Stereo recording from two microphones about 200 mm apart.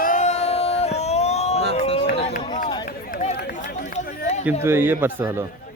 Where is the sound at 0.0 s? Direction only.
40° left (ahead or behind).